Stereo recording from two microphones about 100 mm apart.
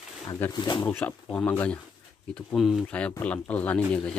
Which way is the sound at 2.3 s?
Centre (ahead or behind).